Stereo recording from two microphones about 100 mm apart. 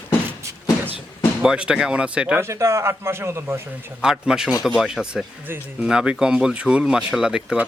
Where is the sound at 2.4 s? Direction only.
30° right (ahead or behind).